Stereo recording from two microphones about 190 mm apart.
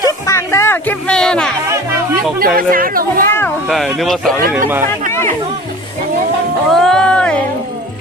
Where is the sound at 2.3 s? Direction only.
50° right (ahead or behind).